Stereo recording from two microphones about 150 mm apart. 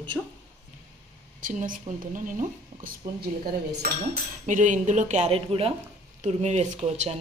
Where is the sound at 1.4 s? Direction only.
60° right (ahead or behind).